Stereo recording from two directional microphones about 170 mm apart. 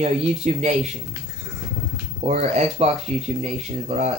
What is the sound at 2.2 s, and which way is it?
Speech, 40° right (ahead or behind).